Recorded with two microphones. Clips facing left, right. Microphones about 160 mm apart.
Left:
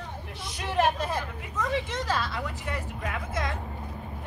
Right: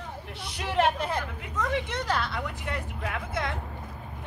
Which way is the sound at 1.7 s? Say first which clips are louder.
Left 1 dB; 60° right (ahead or behind).